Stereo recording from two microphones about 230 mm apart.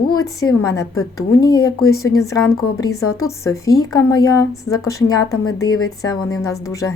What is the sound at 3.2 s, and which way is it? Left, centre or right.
A woman's voice, centre.